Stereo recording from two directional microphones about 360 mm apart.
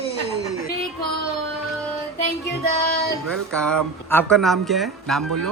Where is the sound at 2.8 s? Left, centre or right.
Left.